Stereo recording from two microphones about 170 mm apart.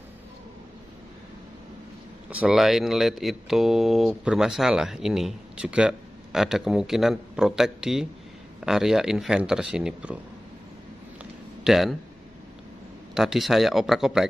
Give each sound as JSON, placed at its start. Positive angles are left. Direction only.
{"t": 2.2, "sound": "speech", "side_deg": -5}
{"t": 11.6, "sound": "speech", "side_deg": 0}
{"t": 13.1, "sound": "speech", "side_deg": 0}